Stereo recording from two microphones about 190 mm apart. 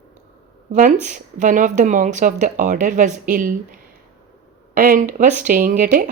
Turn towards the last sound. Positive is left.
turn(degrees=-40)  # may be behind; listen again after turning